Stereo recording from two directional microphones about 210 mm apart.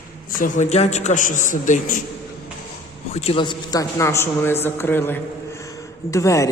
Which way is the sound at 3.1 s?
30° left (ahead or behind).